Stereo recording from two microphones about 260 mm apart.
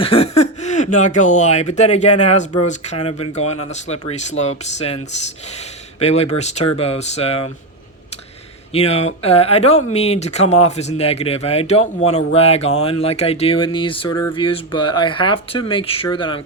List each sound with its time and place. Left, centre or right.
0.0 s speech: left
6.0 s speech: left
8.7 s speech: left